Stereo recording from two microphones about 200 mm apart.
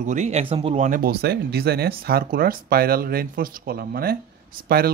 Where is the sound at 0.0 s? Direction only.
35° right (ahead or behind).